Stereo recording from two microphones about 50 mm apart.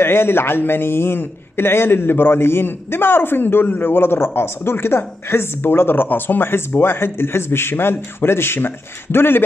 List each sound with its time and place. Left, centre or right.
0.0 s a man's voice: left